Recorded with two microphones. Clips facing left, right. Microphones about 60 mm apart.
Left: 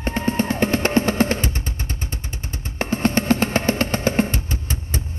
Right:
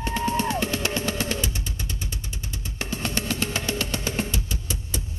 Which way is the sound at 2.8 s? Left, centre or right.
Left.